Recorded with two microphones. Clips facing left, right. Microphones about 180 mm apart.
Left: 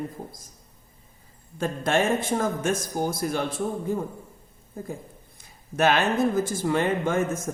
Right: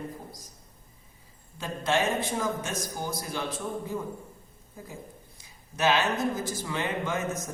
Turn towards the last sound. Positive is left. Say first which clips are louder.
# left 7 dB
turn(degrees=50)  # may be behind; listen again after turning